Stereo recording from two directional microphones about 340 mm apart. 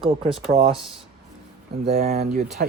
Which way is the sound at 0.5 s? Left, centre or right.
Centre.